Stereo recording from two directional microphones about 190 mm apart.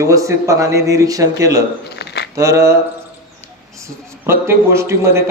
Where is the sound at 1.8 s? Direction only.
60° left (ahead or behind).